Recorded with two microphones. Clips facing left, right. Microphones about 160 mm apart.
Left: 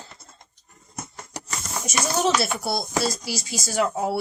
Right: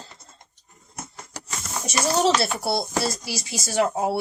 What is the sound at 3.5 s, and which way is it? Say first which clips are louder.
Speech: right 2 dB; 30° right (ahead or behind).